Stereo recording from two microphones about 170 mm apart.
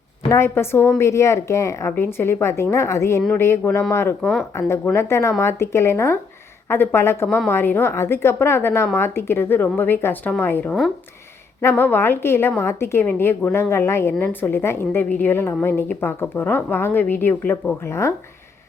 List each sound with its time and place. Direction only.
0.3 s a woman's voice: 15° left (ahead or behind)